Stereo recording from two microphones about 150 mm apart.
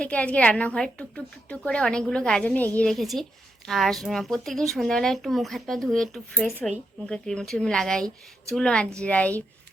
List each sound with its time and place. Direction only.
0.0 s a woman's voice: 10° left (ahead or behind)